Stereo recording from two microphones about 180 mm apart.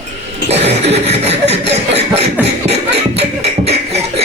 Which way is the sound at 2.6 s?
35° right (ahead or behind).